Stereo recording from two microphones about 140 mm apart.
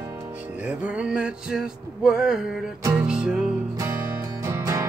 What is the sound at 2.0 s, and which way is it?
Music, 5° right (ahead or behind).